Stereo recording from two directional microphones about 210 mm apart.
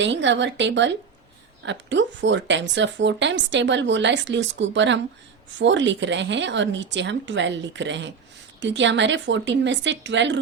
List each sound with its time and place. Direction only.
0.0 s speech: 60° right (ahead or behind)